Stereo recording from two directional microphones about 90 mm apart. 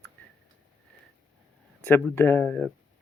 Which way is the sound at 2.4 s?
15° left (ahead or behind).